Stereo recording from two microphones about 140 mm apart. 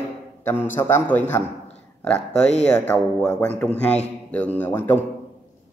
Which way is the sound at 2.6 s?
10° left (ahead or behind).